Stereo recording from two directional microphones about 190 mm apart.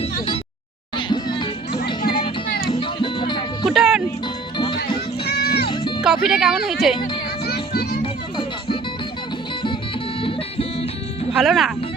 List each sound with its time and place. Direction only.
0.9 s music: 25° left (ahead or behind)
3.7 s music: centre (ahead or behind)
4.5 s music: 25° left (ahead or behind)
5.2 s music: 55° left (ahead or behind)
6.0 s speech: 5° right (ahead or behind)
7.4 s music: 55° left (ahead or behind)
8.0 s music: 25° left (ahead or behind)
10.2 s music: 30° left (ahead or behind)
11.3 s speech: centre (ahead or behind)